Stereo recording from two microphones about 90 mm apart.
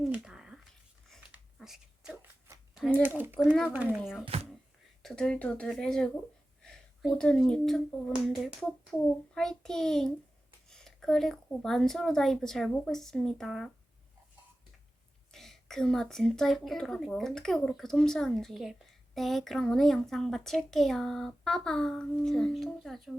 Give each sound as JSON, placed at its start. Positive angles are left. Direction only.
{"t": 0.2, "sound": "a sound", "side_deg": -5}
{"t": 1.5, "sound": "dog", "side_deg": -5}
{"t": 2.1, "sound": "shuffling cards", "side_deg": -25}
{"t": 3.0, "sound": "speech", "side_deg": -20}
{"t": 4.3, "sound": "a sound", "side_deg": -90}
{"t": 5.0, "sound": "a child's voice", "side_deg": 10}
{"t": 7.2, "sound": "a woman's voice", "side_deg": 5}
{"t": 15.3, "sound": "a woman's voice", "side_deg": 5}